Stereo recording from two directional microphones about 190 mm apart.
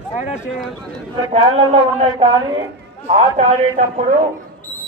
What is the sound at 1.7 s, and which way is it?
A man's voice, 25° right (ahead or behind).